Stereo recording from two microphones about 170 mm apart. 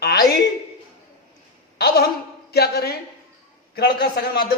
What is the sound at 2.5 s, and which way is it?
A man's voice, 70° left (ahead or behind).